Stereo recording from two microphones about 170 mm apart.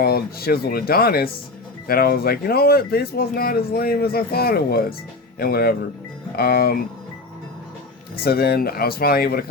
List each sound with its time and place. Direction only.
0.0 s speech: 65° left (ahead or behind)
8.1 s speech: 65° left (ahead or behind)